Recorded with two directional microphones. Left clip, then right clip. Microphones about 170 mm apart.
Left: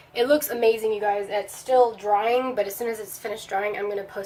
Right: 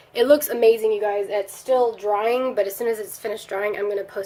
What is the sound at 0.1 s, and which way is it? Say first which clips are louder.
A woman's voice: right 4 dB; 50° right (ahead or behind).